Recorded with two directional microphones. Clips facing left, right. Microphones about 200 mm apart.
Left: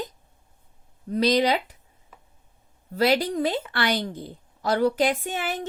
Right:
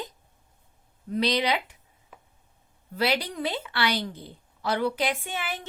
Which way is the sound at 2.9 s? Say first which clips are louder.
Left 5 dB; 45° left (ahead or behind).